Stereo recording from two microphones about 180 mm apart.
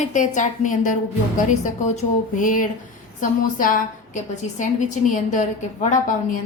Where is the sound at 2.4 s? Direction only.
45° left (ahead or behind).